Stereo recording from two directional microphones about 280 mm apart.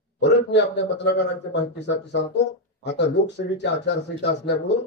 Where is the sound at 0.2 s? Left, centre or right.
Left.